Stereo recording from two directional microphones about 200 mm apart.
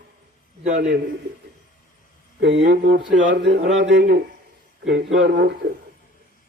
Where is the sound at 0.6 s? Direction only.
40° right (ahead or behind).